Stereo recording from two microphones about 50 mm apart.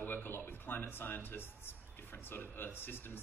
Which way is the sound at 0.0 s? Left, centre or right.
Left.